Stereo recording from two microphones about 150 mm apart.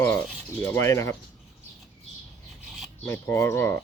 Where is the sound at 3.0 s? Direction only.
15° left (ahead or behind).